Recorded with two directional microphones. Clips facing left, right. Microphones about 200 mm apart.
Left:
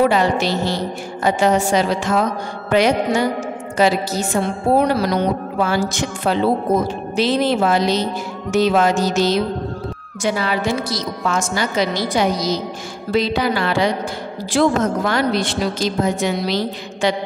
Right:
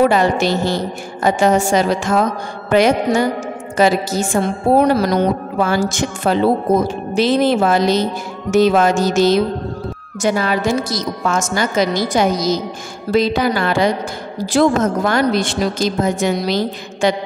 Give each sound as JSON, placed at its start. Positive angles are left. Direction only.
{"t": 0.1, "sound": "a woman's voice", "side_deg": -50}